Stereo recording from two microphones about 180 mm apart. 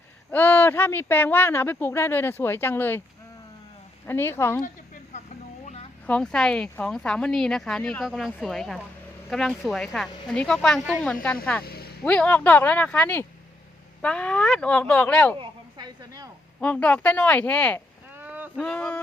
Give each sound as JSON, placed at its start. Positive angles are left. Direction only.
{"t": 0.3, "sound": "speech", "side_deg": 10}
{"t": 4.0, "sound": "speech", "side_deg": 10}
{"t": 6.1, "sound": "speech", "side_deg": 5}
{"t": 11.6, "sound": "vehicle", "side_deg": 60}
{"t": 12.0, "sound": "speech", "side_deg": 5}
{"t": 15.4, "sound": "a sound", "side_deg": -20}
{"t": 16.6, "sound": "speech", "side_deg": 5}
{"t": 18.2, "sound": "boat", "side_deg": -10}
{"t": 18.5, "sound": "speech", "side_deg": 5}